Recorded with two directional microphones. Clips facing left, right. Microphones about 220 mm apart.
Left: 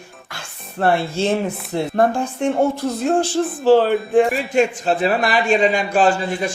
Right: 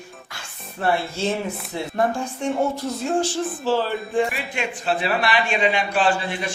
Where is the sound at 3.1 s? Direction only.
55° left (ahead or behind).